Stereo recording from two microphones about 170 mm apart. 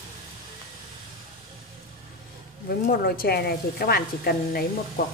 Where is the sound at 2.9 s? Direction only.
60° left (ahead or behind).